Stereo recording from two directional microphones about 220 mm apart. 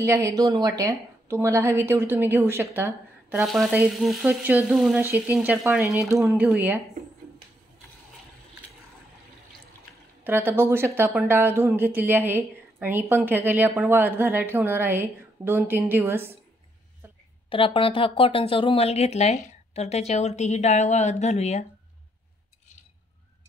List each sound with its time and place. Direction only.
0.0 s a woman's voice: 15° right (ahead or behind)
4.0 s frying: centre (ahead or behind)
5.4 s a woman's voice: 5° right (ahead or behind)
10.2 s a woman's voice: 10° right (ahead or behind)
17.5 s speech: 25° left (ahead or behind)